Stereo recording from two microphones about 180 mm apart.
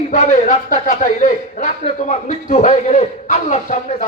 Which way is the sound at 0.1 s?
45° left (ahead or behind).